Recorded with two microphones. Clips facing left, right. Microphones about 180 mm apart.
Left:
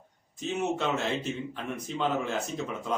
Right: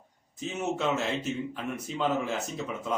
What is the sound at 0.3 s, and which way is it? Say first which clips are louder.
Speech: left 1 dB; centre (ahead or behind).